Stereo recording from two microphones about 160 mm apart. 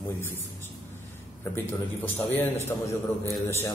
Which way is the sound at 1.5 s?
15° left (ahead or behind).